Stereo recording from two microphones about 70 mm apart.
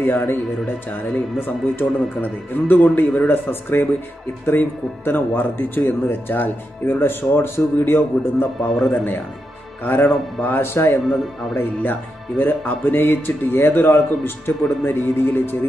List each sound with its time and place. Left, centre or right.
0.0 s speech: left
1.4 s speech: left
9.8 s speech: left